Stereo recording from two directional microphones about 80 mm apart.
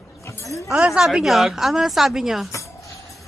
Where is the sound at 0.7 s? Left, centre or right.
Centre.